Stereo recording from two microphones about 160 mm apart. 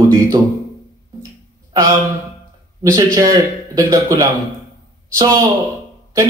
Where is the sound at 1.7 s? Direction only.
20° right (ahead or behind).